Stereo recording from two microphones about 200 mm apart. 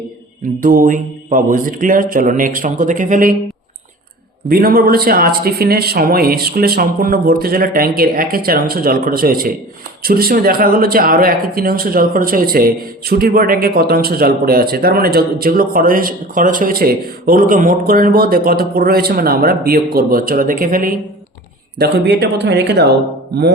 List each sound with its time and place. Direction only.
0.6 s speech: 45° right (ahead or behind)
4.4 s speech: 50° right (ahead or behind)
21.8 s speech: 55° right (ahead or behind)